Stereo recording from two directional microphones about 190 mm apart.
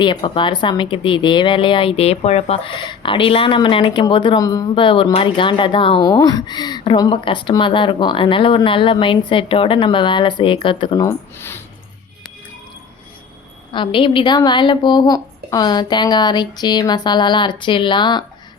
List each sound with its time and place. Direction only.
0.0 s a woman's voice: 25° left (ahead or behind)
13.7 s a woman's voice: 25° left (ahead or behind)